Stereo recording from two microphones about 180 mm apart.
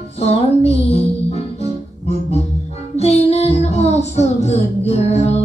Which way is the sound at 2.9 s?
35° left (ahead or behind).